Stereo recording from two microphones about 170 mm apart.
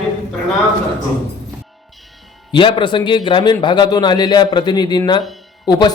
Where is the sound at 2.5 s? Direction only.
30° left (ahead or behind).